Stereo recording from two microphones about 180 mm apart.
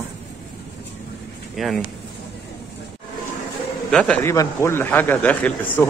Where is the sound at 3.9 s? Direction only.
5° left (ahead or behind).